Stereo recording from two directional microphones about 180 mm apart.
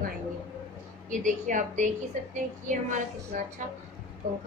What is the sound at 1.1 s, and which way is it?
A woman's voice, 45° right (ahead or behind).